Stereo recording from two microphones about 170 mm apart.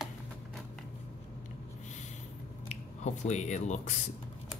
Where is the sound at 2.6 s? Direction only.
45° left (ahead or behind).